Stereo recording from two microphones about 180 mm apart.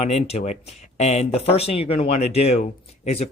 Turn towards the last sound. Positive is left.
turn(degrees=35)  # may be behind; listen again after turning